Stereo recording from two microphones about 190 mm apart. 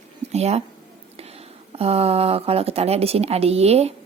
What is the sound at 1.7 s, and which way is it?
Speech, 30° right (ahead or behind).